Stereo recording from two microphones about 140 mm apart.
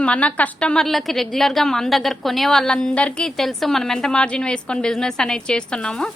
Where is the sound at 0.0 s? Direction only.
10° left (ahead or behind).